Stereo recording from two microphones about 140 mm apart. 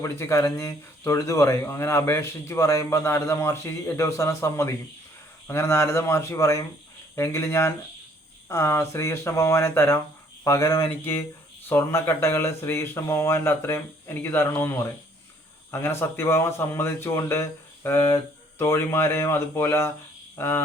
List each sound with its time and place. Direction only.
0.0 s speech: 20° left (ahead or behind)
20.3 s cricket: 15° left (ahead or behind)